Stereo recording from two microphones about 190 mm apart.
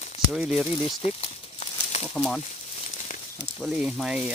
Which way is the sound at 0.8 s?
25° left (ahead or behind).